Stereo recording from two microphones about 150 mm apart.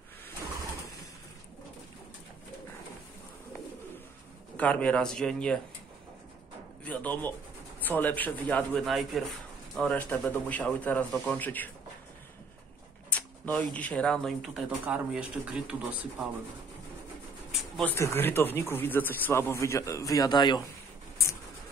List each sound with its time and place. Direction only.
4.6 s speech: 10° left (ahead or behind)
6.8 s speech: 10° left (ahead or behind)
13.1 s speech: 10° left (ahead or behind); by 16.3 s 5° right (ahead or behind)
17.5 s a sound: centre (ahead or behind)
17.8 s speech: 15° left (ahead or behind)